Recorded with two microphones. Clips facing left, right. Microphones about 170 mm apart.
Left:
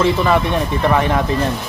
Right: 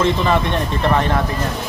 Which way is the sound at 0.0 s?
10° left (ahead or behind).